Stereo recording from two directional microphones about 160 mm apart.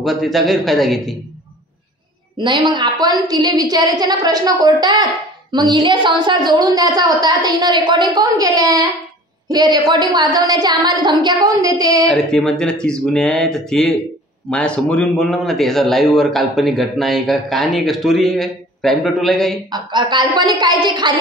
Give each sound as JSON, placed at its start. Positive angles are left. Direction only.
{"t": 0.0, "sound": "a man's voice", "side_deg": 0}
{"t": 2.3, "sound": "a woman's voice", "side_deg": -30}
{"t": 12.1, "sound": "a man's voice", "side_deg": 5}
{"t": 19.7, "sound": "a woman's voice", "side_deg": -30}